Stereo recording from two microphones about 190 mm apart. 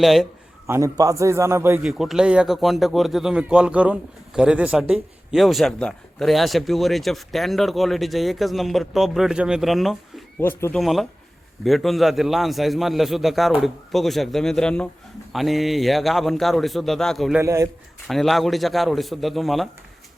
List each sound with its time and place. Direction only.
0.0 s speech: centre (ahead or behind)
0.7 s speech: 15° right (ahead or behind); by 10.2 s centre (ahead or behind)
10.4 s speech: 10° left (ahead or behind)
17.4 s a man's voice: 15° right (ahead or behind)
18.1 s speech: centre (ahead or behind)